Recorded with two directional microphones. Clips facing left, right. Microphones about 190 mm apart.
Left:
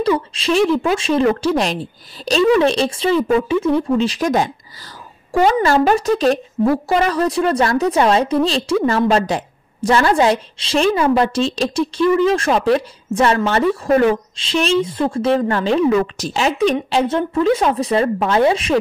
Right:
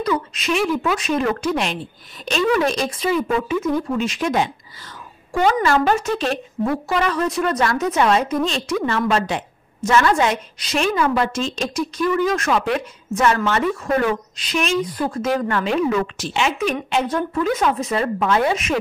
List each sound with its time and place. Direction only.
0.0 s a woman's voice: 30° left (ahead or behind)